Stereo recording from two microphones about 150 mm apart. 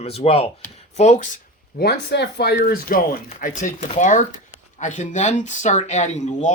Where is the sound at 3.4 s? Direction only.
65° left (ahead or behind).